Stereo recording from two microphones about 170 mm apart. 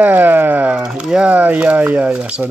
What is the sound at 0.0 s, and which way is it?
Speech, 10° right (ahead or behind).